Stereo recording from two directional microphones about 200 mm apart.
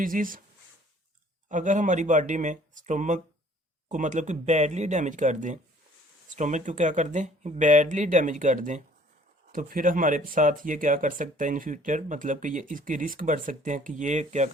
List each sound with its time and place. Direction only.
0.0 s speech: 45° right (ahead or behind)
1.5 s speech: 40° right (ahead or behind)